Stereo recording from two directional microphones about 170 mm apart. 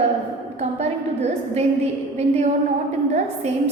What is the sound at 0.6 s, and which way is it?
A woman's voice, 40° right (ahead or behind).